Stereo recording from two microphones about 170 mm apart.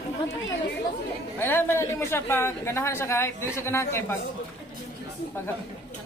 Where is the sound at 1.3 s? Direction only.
15° left (ahead or behind).